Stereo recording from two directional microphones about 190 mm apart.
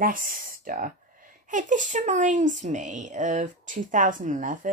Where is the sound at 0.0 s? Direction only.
45° right (ahead or behind).